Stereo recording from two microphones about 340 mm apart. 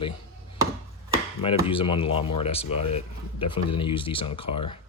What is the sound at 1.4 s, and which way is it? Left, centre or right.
Speech, centre.